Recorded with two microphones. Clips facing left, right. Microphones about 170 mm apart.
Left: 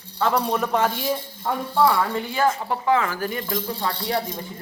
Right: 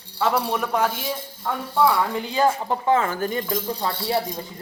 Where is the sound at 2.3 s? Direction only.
20° right (ahead or behind).